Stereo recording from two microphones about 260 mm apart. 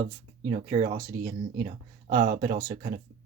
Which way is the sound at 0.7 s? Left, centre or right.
Centre.